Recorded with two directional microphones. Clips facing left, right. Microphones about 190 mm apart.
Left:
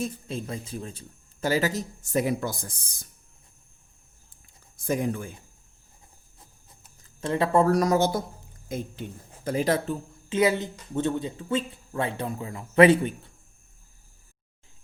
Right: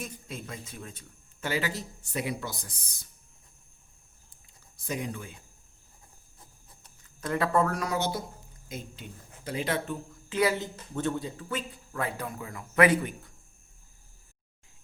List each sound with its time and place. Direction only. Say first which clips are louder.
0.0 s speech: left 8 dB; 30° left (ahead or behind); by 3.1 s 50° left (ahead or behind)
4.9 s speech: left 7 dB; 50° left (ahead or behind)
7.2 s speech: left 4 dB; 25° left (ahead or behind)
10.2 s a woman's voice: left 4 dB; 20° left (ahead or behind)